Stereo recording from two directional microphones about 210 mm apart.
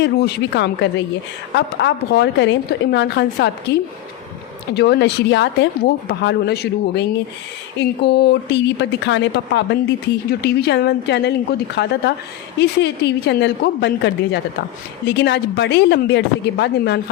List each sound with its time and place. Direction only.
0.0 s a woman's voice: 55° left (ahead or behind)